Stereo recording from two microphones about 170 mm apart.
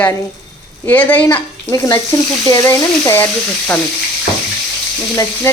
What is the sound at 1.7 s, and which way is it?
A woman's voice, 20° left (ahead or behind).